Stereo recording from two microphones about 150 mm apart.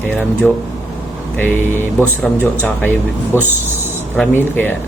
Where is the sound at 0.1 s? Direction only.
10° left (ahead or behind).